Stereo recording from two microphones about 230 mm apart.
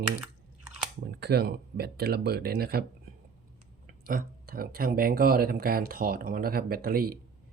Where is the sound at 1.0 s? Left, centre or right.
Right.